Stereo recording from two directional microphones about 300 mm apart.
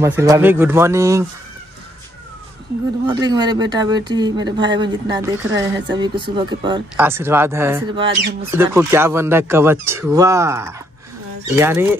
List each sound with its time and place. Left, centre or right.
0.0 s speech: centre
3.1 s speech: centre
8.2 s speech: right
8.5 s speech: centre